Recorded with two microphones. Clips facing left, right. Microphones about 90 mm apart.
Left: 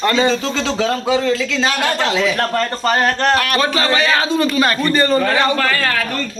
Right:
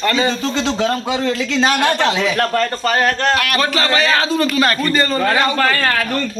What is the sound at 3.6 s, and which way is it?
A man's voice, 15° left (ahead or behind).